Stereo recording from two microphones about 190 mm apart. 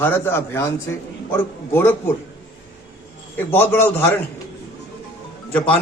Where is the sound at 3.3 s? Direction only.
10° left (ahead or behind).